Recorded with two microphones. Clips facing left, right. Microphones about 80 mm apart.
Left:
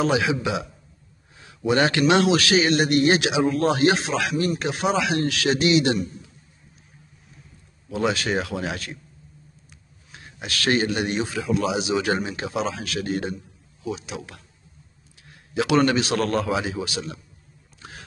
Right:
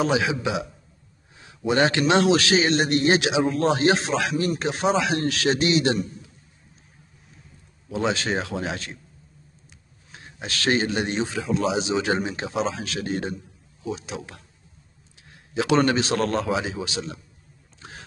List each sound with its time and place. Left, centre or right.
0.0 s a man's voice: right
1.7 s a man's voice: right
7.9 s a man's voice: right
10.1 s a man's voice: right
15.5 s a man's voice: right